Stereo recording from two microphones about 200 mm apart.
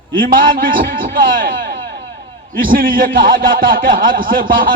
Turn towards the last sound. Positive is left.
turn(degrees=-45)  # may be behind; listen again after turning